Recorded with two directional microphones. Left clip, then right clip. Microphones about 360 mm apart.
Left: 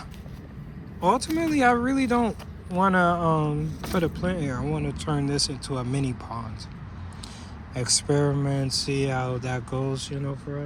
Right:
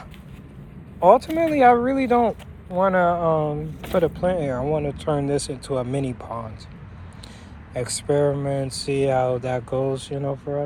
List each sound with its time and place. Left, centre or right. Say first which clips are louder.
1.0 s speech: right 8 dB; centre
7.7 s speech: right 2 dB; centre